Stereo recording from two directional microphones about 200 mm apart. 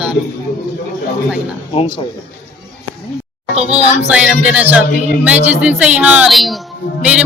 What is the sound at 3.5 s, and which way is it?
Speech, 30° right (ahead or behind).